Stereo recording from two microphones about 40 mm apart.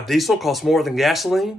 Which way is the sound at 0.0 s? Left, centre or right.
Centre.